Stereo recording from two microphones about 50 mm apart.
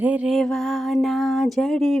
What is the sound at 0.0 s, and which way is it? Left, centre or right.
Music, right.